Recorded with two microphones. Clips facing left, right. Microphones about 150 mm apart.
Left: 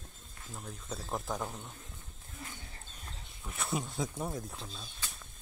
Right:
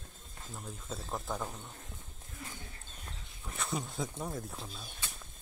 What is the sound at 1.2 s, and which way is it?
Speech, centre (ahead or behind).